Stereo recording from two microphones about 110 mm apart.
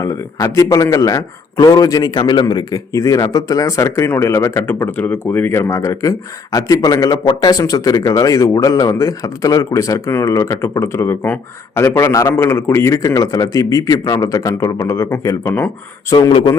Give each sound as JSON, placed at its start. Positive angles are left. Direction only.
{"t": 0.0, "sound": "speech", "side_deg": 30}
{"t": 16.3, "sound": "a man's voice", "side_deg": 45}